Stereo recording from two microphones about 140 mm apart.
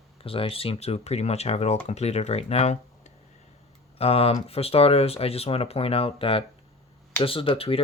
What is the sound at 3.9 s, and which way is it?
Speech, 45° left (ahead or behind).